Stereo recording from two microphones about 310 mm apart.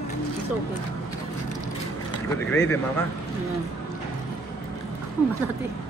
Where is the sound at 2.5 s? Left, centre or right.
Centre.